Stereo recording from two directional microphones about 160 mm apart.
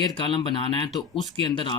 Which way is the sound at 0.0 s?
30° left (ahead or behind).